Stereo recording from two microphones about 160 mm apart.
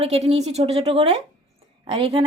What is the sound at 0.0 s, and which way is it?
Speech, 40° right (ahead or behind).